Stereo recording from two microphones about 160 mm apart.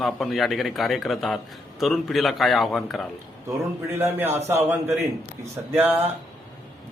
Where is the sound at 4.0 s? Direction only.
15° right (ahead or behind).